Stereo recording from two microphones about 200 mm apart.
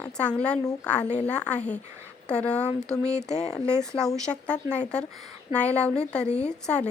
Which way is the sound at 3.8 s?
5° left (ahead or behind).